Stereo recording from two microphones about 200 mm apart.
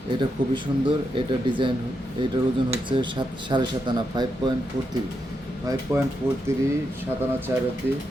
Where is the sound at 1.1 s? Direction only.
25° right (ahead or behind).